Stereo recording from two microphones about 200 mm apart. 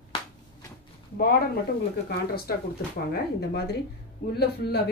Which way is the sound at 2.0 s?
50° left (ahead or behind).